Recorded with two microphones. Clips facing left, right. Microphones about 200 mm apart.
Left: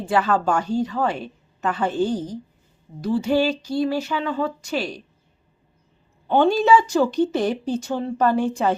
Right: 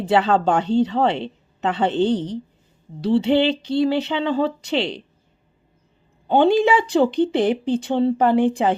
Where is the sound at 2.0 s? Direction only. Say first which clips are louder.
Right 3 dB; 70° right (ahead or behind).